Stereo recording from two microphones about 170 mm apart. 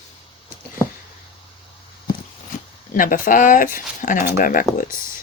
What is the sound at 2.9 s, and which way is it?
Speech, 55° left (ahead or behind).